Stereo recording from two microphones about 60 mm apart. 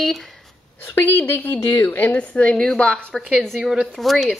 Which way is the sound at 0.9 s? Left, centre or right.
Left.